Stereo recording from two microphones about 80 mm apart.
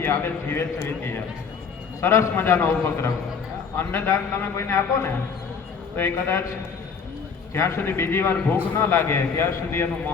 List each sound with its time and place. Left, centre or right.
0.0 s a man's voice: left
6.0 s a man's voice: left
7.5 s a man's voice: left